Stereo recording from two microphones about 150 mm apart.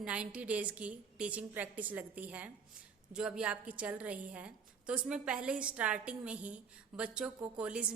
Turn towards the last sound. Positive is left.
turn(degrees=-5)  # may be behind; listen again after turning